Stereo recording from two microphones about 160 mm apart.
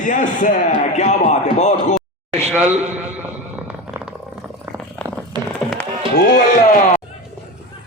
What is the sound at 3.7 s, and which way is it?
Purr, 5° right (ahead or behind).